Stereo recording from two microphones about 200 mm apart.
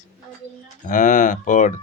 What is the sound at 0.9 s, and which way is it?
Speech, 40° left (ahead or behind).